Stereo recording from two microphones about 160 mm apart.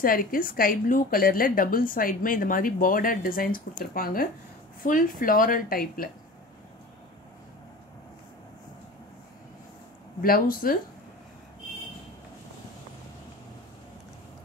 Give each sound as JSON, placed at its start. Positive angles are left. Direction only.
{"t": 0.0, "sound": "a woman's voice", "side_deg": 65}
{"t": 10.2, "sound": "a woman's voice", "side_deg": 65}